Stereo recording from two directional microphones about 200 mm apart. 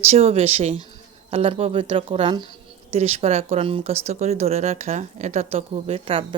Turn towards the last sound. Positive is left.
turn(degrees=-30)  # may be behind; listen again after turning